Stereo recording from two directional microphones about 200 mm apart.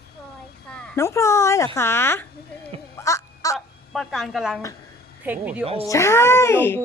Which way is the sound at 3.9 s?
Centre (ahead or behind).